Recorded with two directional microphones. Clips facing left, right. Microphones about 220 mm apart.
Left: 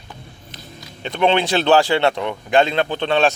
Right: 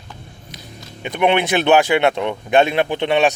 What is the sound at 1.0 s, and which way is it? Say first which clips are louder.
Speech: right 1 dB; 15° right (ahead or behind).